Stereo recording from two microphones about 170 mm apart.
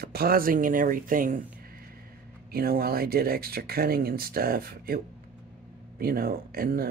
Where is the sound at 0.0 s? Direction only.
65° right (ahead or behind).